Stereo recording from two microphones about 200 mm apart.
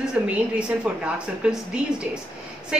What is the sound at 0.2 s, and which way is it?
A woman's voice, 10° right (ahead or behind).